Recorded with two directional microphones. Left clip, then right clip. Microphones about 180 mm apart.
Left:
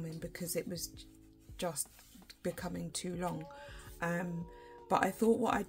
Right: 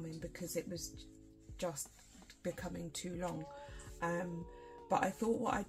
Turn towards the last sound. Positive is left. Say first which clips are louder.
# left 5 dB
turn(degrees=50)  # may be behind; listen again after turning